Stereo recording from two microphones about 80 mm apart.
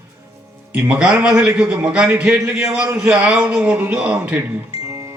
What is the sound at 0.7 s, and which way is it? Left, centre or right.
A man's voice, centre.